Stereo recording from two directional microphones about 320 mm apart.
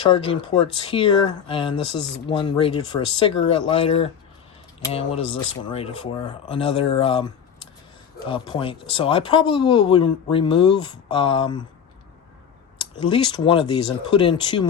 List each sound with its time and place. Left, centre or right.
0.1 s speech: centre
13.0 s speech: centre